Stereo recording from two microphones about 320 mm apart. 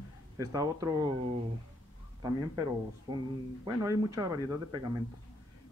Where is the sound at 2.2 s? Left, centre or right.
Centre.